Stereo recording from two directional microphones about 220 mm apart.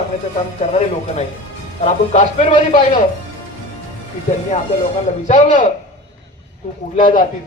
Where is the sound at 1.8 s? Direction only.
35° left (ahead or behind).